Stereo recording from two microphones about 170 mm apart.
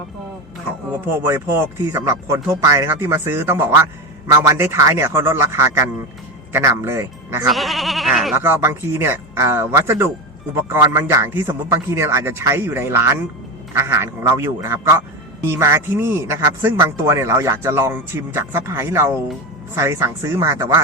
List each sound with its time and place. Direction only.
1.2 s speech: 15° right (ahead or behind)
7.4 s speech: centre (ahead or behind)
8.4 s speech: 15° right (ahead or behind)